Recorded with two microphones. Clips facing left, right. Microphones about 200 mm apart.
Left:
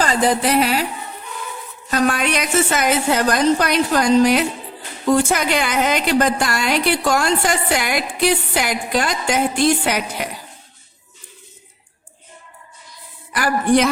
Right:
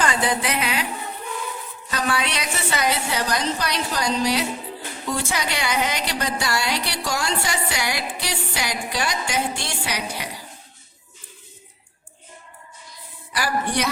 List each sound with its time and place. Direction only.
0.0 s speech: 35° left (ahead or behind)
1.9 s a woman's voice: 45° left (ahead or behind)
13.3 s a woman's voice: 50° left (ahead or behind)